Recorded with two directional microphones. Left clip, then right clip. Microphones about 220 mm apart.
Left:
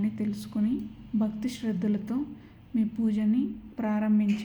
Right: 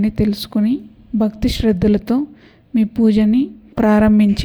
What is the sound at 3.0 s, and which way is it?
Speech, 40° right (ahead or behind).